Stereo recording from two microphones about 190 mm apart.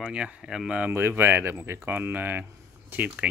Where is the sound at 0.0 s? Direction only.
5° right (ahead or behind).